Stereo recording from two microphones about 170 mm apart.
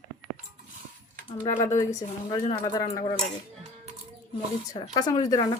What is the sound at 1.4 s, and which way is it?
A woman's voice, 30° left (ahead or behind).